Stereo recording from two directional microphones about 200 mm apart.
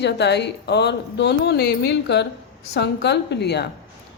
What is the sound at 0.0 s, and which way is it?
A woman's voice, 55° left (ahead or behind).